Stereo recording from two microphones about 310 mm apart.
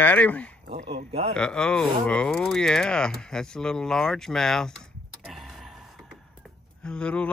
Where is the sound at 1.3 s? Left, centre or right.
Centre.